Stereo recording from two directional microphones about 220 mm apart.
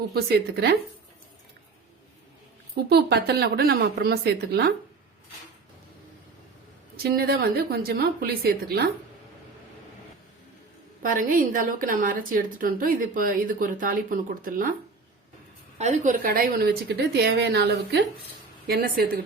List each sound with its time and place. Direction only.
0.1 s a woman's voice: 45° right (ahead or behind)
2.9 s a woman's voice: 45° right (ahead or behind)
7.0 s a woman's voice: 45° right (ahead or behind)
11.0 s a woman's voice: 40° right (ahead or behind)
15.8 s a woman's voice: 40° right (ahead or behind)